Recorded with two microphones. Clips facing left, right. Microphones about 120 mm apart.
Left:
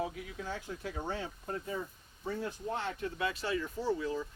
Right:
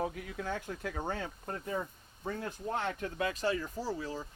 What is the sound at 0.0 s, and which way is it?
Speech, 50° right (ahead or behind).